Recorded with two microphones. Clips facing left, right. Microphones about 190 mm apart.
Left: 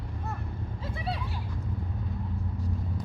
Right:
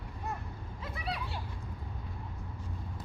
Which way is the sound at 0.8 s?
25° left (ahead or behind).